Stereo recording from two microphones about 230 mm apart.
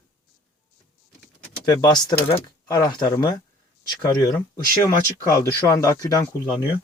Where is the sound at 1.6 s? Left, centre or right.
Centre.